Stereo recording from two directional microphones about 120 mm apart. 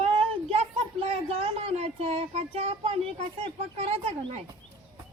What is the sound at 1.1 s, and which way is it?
Speech, 55° right (ahead or behind).